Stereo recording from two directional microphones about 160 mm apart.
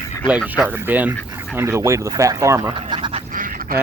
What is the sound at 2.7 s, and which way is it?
Speech, 30° right (ahead or behind).